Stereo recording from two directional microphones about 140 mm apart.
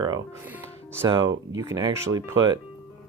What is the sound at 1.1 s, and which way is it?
Speech, 35° right (ahead or behind).